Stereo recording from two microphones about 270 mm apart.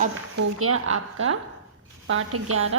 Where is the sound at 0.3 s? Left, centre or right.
Right.